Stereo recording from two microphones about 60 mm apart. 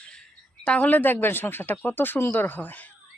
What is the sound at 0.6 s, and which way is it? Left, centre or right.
Speech, left.